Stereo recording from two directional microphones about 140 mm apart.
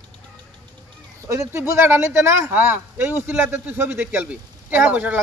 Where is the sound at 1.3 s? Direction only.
20° right (ahead or behind).